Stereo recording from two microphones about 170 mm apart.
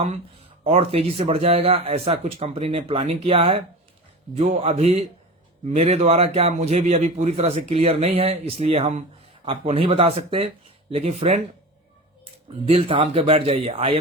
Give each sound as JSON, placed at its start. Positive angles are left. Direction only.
{"t": 0.6, "sound": "a man's voice", "side_deg": -40}